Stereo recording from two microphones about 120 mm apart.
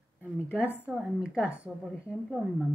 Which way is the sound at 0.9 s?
5° right (ahead or behind).